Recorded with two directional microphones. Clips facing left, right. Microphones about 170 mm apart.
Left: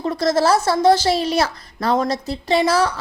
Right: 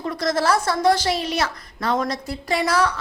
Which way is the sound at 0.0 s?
30° left (ahead or behind).